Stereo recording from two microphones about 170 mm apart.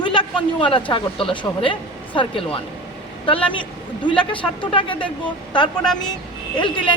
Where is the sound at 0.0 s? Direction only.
30° left (ahead or behind).